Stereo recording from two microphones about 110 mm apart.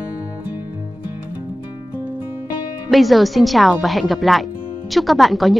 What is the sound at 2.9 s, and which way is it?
A woman's voice, centre (ahead or behind).